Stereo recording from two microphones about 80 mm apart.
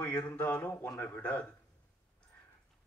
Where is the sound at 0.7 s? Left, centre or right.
Left.